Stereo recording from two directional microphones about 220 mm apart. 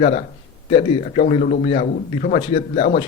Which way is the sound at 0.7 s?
25° left (ahead or behind).